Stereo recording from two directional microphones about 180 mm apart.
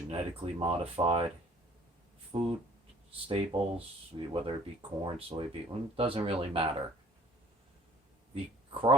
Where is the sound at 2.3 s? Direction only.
35° right (ahead or behind).